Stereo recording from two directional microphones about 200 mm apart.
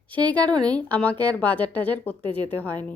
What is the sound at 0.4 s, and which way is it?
Speech, 20° right (ahead or behind).